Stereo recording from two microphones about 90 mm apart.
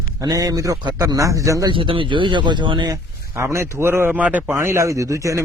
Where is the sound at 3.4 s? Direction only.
35° right (ahead or behind); by 4.6 s 20° right (ahead or behind).